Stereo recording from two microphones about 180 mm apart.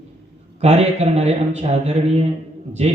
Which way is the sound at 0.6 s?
35° right (ahead or behind).